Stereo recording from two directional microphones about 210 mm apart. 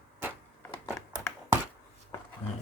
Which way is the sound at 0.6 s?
10° left (ahead or behind).